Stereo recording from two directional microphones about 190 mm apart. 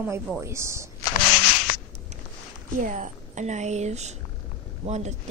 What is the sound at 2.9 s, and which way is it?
A woman's voice, 40° right (ahead or behind).